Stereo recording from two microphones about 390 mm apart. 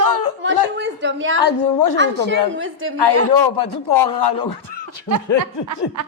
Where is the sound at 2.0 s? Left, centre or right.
Right.